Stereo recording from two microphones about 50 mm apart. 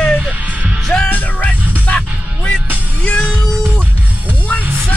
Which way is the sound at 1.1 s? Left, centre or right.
Left.